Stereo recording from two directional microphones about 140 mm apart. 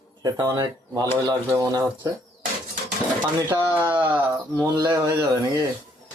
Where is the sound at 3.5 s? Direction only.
15° right (ahead or behind).